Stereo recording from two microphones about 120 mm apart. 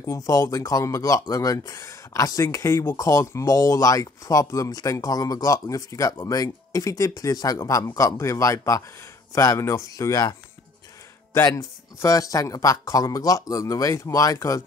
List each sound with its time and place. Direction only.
0.0 s speech: 30° left (ahead or behind)
11.4 s speech: 25° left (ahead or behind)